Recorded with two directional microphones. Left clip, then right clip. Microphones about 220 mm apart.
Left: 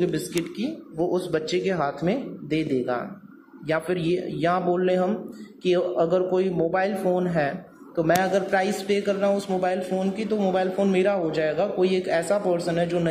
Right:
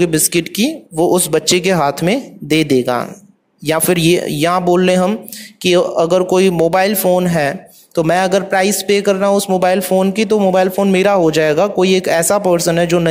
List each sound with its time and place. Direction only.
0.0 s speech: 60° right (ahead or behind)